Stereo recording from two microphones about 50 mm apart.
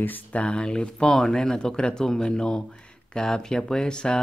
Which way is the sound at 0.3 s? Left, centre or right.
Left.